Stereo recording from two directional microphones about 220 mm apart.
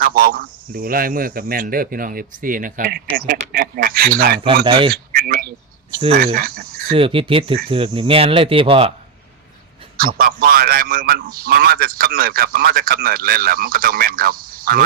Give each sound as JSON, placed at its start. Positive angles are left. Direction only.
{"t": 0.0, "sound": "speech", "side_deg": -40}
{"t": 4.6, "sound": "speech", "side_deg": -20}
{"t": 5.1, "sound": "a sound", "side_deg": -40}
{"t": 6.1, "sound": "cricket", "side_deg": -45}
{"t": 6.9, "sound": "speech", "side_deg": -25}
{"t": 10.2, "sound": "a man's voice", "side_deg": -40}